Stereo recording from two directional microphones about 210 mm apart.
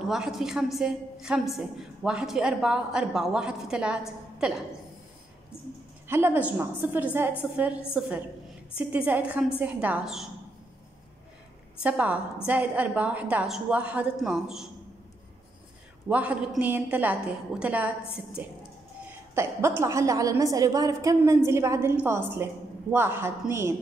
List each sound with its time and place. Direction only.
0.0 s a woman's voice: centre (ahead or behind)
6.0 s a woman's voice: 10° right (ahead or behind)
11.8 s a woman's voice: 5° right (ahead or behind)
16.1 s a woman's voice: 5° right (ahead or behind)